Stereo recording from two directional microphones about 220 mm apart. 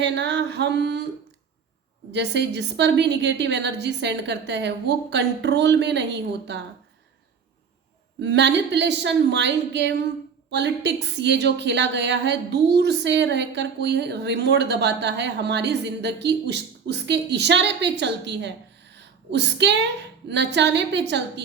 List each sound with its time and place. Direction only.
0.0 s speech: 50° right (ahead or behind)
2.1 s speech: 50° right (ahead or behind)
8.2 s speech: 50° right (ahead or behind)
18.9 s a sound: 50° right (ahead or behind)
20.2 s speech: 50° right (ahead or behind)